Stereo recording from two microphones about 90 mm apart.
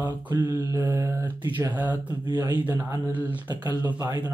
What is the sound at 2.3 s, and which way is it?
Speech, 50° right (ahead or behind).